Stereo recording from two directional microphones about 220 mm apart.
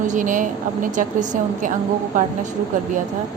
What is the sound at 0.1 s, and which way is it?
A woman's voice, 35° right (ahead or behind).